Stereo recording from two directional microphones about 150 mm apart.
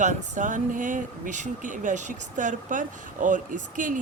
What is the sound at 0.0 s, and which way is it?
Speech, 55° right (ahead or behind).